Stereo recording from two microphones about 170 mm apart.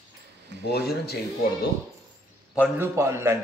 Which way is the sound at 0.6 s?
70° left (ahead or behind).